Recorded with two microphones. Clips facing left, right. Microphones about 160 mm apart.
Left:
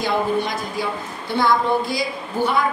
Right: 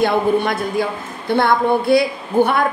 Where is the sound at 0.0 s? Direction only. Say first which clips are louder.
Right 5 dB; 55° right (ahead or behind).